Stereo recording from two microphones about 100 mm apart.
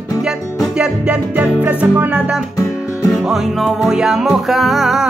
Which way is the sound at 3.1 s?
Centre (ahead or behind).